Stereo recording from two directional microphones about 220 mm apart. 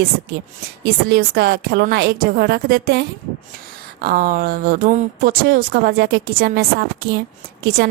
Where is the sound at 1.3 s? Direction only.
50° right (ahead or behind).